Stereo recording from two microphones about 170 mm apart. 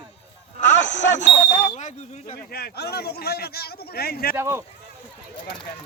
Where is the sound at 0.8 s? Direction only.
90° left.